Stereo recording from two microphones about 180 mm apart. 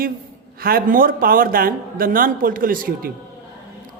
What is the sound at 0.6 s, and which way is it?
A man's voice, 55° right (ahead or behind).